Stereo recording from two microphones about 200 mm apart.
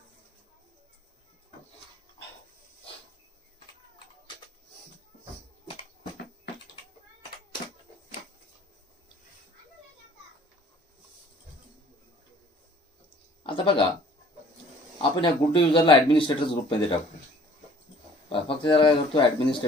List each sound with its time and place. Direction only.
13.5 s a sound: 25° left (ahead or behind)
15.0 s speech: 25° left (ahead or behind)
18.3 s speech: 25° left (ahead or behind)